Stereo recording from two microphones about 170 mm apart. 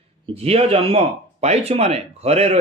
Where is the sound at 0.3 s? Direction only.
35° right (ahead or behind).